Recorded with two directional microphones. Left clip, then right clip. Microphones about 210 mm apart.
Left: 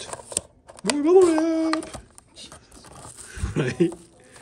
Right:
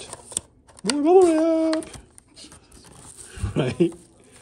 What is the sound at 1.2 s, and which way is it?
Child singing, 30° left (ahead or behind).